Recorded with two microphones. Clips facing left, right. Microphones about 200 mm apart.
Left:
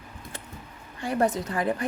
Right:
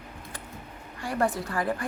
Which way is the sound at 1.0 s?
20° left (ahead or behind).